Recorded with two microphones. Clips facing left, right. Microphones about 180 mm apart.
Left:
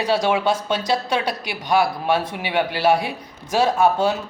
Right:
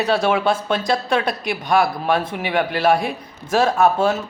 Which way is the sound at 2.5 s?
10° left (ahead or behind).